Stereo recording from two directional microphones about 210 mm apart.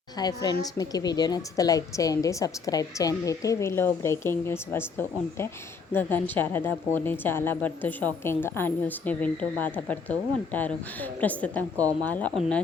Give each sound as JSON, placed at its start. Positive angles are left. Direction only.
{"t": 0.2, "sound": "a woman's voice", "side_deg": 20}